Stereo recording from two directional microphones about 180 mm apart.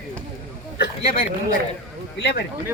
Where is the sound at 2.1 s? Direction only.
65° left (ahead or behind).